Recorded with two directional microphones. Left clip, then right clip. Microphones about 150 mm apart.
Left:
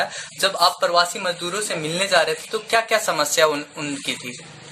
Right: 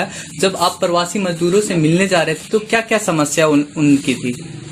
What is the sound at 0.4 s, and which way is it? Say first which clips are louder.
Speech: right 3 dB; 45° right (ahead or behind).